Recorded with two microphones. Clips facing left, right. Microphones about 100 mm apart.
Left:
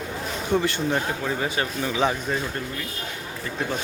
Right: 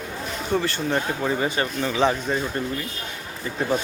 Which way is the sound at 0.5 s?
5° right (ahead or behind).